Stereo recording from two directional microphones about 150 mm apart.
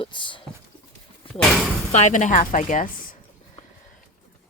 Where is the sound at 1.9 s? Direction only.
55° left (ahead or behind).